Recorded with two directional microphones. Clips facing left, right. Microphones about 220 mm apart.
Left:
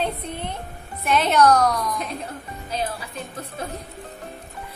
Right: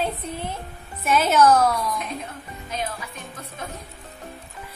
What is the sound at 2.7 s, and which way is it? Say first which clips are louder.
Speech: left 3 dB; 35° left (ahead or behind).